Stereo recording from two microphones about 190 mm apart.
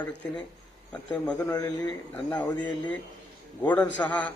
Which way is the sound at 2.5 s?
25° left (ahead or behind).